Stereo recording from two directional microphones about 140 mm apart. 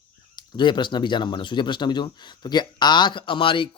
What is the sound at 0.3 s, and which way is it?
Speech, 35° left (ahead or behind).